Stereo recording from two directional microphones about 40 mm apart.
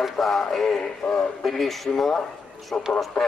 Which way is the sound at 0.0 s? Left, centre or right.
Centre.